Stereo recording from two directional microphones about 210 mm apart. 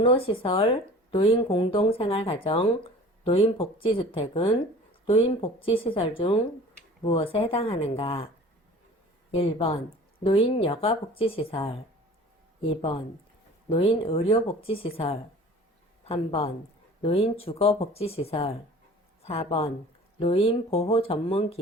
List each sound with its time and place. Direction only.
0.0 s speech: 25° left (ahead or behind)
9.3 s speech: 30° left (ahead or behind)
13.7 s speech: 25° left (ahead or behind)